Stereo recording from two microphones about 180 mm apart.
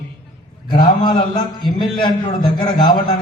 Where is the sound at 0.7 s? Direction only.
25° left (ahead or behind).